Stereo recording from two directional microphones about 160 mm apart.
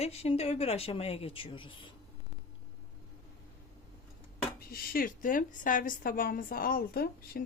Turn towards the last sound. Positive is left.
turn(degrees=70)  # may be behind; listen again after turning